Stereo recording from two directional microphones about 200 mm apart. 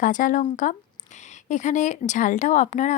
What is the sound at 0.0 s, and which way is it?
A woman's voice, 40° left (ahead or behind).